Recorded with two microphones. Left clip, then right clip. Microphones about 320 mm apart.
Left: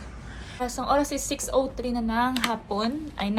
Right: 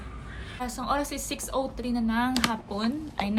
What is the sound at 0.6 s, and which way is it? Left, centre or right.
A woman's voice, centre.